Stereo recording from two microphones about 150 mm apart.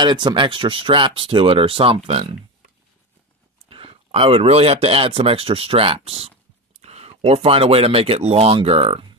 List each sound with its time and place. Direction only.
0.0 s speech: 30° right (ahead or behind)
3.6 s speech: 40° right (ahead or behind)